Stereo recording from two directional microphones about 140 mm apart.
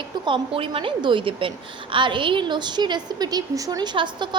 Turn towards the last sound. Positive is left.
turn(degrees=-35)  # may be behind; listen again after turning